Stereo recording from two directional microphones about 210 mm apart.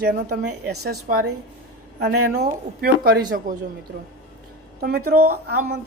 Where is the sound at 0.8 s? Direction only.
50° right (ahead or behind).